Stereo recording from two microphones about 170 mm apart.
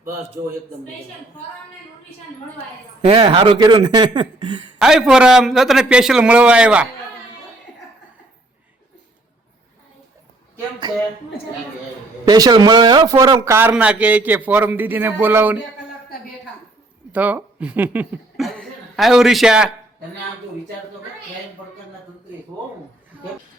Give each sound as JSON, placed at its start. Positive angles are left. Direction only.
{"t": 3.1, "sound": "speech", "side_deg": -35}
{"t": 4.8, "sound": "a man's voice", "side_deg": 0}
{"t": 12.3, "sound": "speech", "side_deg": -25}
{"t": 17.1, "sound": "speech", "side_deg": -10}